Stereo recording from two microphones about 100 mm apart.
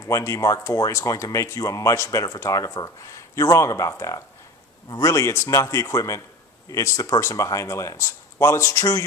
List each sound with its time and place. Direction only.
0.1 s speech: 30° left (ahead or behind)